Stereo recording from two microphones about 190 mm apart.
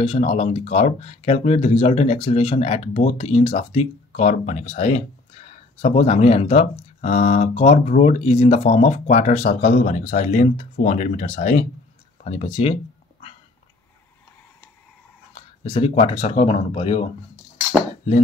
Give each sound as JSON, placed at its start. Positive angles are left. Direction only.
{"t": 0.0, "sound": "speech", "side_deg": 35}
{"t": 15.3, "sound": "speech", "side_deg": 30}